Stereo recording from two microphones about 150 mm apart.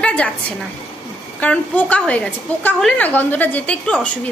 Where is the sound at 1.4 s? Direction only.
10° left (ahead or behind).